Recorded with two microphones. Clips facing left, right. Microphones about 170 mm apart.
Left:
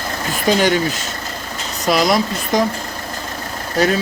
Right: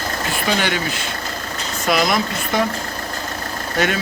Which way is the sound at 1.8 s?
35° left (ahead or behind).